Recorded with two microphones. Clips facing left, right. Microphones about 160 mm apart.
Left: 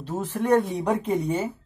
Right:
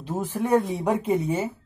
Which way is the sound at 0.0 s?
10° right (ahead or behind).